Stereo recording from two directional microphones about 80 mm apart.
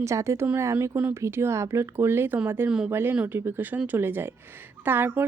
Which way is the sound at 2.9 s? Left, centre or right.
Right.